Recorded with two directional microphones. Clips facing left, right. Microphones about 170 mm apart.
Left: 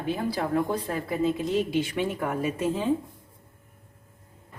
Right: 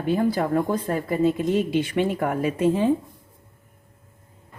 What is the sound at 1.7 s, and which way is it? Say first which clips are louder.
Speech: right 4 dB; 60° right (ahead or behind).